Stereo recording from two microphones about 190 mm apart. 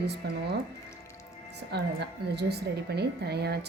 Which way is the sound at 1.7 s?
60° right (ahead or behind).